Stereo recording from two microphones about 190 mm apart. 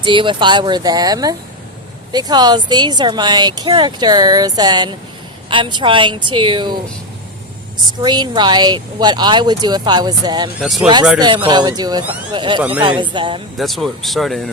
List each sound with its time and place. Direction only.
0.0 s speech: 25° right (ahead or behind)
7.9 s speech: 20° right (ahead or behind)
13.6 s speech: centre (ahead or behind)